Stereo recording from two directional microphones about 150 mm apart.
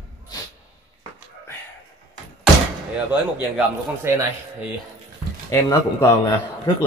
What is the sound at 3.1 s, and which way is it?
A man's voice, 15° right (ahead or behind).